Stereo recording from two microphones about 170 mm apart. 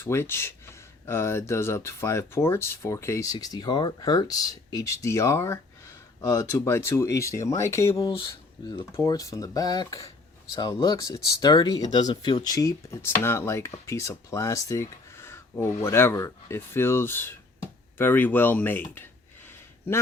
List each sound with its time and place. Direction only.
0.0 s speech: 15° left (ahead or behind)